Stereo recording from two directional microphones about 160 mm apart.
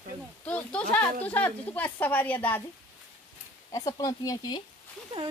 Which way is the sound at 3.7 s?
20° left (ahead or behind).